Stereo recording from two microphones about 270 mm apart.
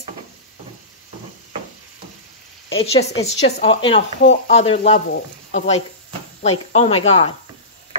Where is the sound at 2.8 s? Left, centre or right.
Left.